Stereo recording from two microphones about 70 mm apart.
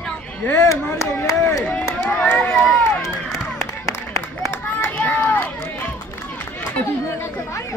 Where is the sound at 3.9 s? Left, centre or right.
Left.